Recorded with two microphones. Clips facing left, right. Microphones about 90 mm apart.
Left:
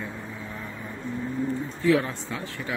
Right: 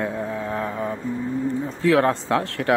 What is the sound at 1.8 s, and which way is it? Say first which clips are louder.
Speech: right 5 dB; 80° right.